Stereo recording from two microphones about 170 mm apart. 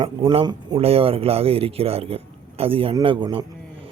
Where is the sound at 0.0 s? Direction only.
30° right (ahead or behind).